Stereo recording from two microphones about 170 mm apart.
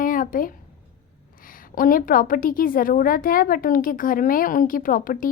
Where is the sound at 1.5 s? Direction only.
55° left (ahead or behind).